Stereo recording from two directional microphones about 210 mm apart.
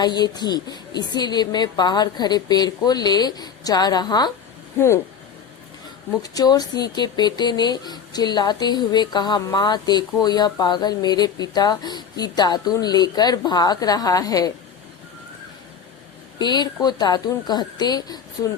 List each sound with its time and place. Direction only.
0.0 s speech: 20° left (ahead or behind)
6.2 s speech: 15° left (ahead or behind)
16.4 s speech: 20° left (ahead or behind)